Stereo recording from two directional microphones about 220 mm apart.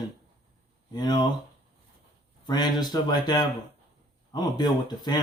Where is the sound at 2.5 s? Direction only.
20° left (ahead or behind).